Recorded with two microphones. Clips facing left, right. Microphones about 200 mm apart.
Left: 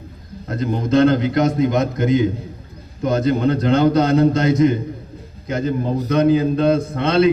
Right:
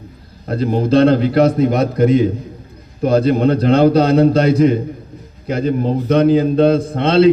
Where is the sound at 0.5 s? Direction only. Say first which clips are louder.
Right 3 dB; 30° right (ahead or behind).